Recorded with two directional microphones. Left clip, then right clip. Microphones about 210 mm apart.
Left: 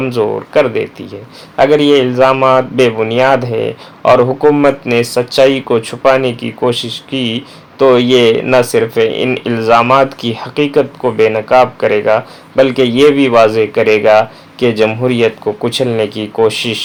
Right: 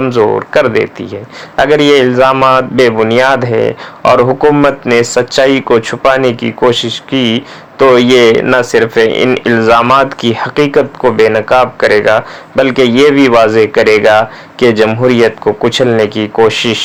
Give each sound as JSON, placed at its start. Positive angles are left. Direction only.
{"t": 0.0, "sound": "speech", "side_deg": -20}